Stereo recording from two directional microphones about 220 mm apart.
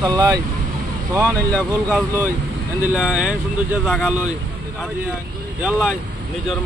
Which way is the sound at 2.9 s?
5° right (ahead or behind).